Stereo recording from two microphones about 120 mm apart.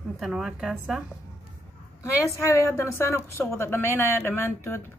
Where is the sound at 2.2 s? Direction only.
25° left (ahead or behind).